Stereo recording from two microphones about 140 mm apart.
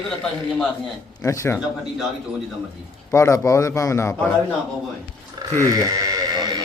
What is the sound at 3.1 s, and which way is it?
A man's voice, 20° left (ahead or behind).